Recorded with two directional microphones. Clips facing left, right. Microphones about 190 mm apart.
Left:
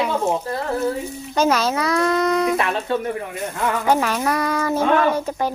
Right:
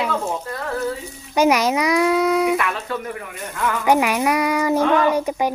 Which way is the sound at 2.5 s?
30° left (ahead or behind).